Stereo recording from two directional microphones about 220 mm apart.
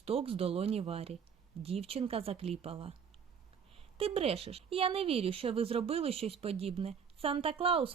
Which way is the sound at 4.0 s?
25° right (ahead or behind).